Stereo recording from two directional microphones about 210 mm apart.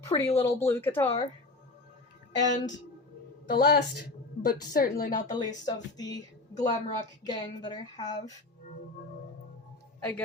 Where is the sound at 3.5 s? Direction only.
45° left (ahead or behind).